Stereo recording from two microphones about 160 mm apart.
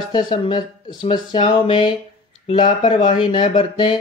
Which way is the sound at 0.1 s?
30° left (ahead or behind).